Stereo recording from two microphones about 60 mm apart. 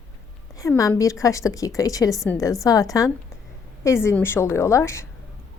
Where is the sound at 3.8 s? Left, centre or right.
Left.